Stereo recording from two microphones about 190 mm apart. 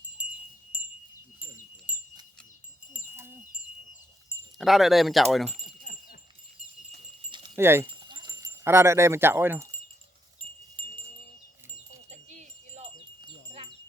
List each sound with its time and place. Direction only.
0.2 s wind chime: 5° right (ahead or behind)
4.5 s speech: centre (ahead or behind)
5.6 s a sound: 45° left (ahead or behind)
7.3 s keys jangling: 25° right (ahead or behind)
7.5 s speech: 15° right (ahead or behind)
7.9 s a sound: 25° right (ahead or behind)
12.3 s wind chime: 40° right (ahead or behind)